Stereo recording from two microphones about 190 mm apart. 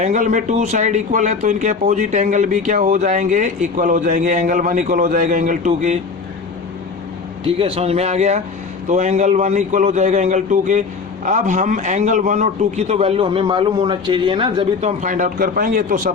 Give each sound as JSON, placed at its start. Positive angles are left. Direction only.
{"t": 0.0, "sound": "speech", "side_deg": -40}
{"t": 7.4, "sound": "speech", "side_deg": -30}